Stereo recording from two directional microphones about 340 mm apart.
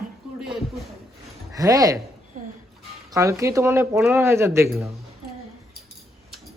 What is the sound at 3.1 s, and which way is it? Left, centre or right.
Speech, centre.